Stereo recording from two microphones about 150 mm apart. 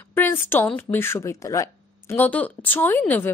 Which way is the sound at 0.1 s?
15° left (ahead or behind).